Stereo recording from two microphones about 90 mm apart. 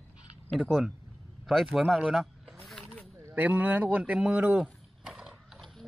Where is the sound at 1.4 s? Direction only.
Centre (ahead or behind).